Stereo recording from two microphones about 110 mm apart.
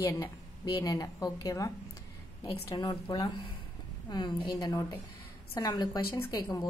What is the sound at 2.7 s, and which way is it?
A woman's voice, 35° left (ahead or behind).